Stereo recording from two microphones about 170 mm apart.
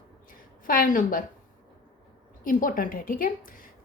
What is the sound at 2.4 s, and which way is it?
A woman's voice, 55° left (ahead or behind).